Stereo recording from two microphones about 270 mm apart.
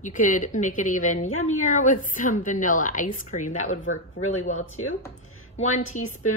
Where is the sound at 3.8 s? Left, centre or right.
Left.